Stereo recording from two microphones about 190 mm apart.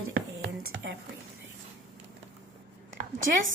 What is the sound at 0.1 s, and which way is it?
Whispering, 55° right (ahead or behind).